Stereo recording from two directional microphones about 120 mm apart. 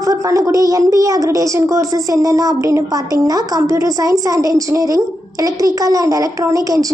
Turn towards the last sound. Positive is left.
turn(degrees=-30)  # may be behind; listen again after turning